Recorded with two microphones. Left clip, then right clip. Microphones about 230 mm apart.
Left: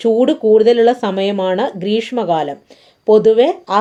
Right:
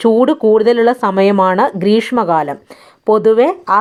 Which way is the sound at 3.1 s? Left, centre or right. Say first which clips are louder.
Even; right.